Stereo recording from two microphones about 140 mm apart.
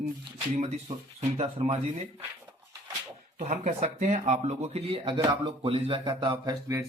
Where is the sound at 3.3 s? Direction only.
60° right (ahead or behind).